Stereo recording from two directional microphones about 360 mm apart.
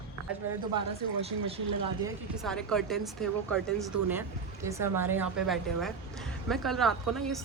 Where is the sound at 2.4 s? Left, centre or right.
Centre.